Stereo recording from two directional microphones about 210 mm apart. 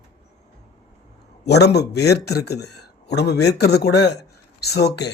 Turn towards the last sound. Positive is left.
turn(degrees=50)  # may be behind; listen again after turning